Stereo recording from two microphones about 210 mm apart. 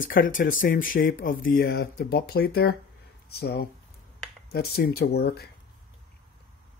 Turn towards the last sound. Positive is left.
turn(degrees=50)  # may be behind; listen again after turning